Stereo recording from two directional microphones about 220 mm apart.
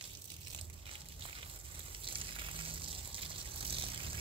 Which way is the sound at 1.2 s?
25° right (ahead or behind).